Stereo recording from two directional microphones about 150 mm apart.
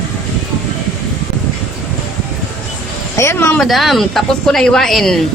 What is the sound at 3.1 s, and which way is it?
Speech, 20° left (ahead or behind).